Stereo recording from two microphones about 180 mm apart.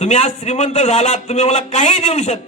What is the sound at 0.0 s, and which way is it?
A man's voice, 40° left (ahead or behind).